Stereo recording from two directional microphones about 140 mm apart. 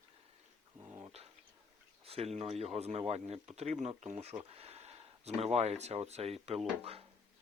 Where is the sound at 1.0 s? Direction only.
45° right (ahead or behind).